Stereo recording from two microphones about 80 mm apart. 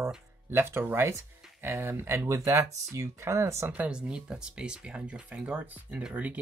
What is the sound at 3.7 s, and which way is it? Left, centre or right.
Speech, centre.